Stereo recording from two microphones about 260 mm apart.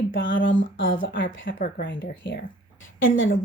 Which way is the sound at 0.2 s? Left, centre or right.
Left.